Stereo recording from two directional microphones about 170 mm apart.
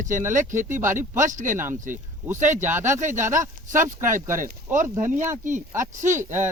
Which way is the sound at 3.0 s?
45° right (ahead or behind).